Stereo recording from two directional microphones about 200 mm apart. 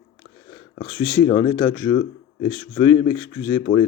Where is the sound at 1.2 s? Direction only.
25° left (ahead or behind).